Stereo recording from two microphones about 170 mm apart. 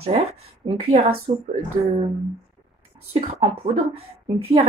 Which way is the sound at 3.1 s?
45° right (ahead or behind).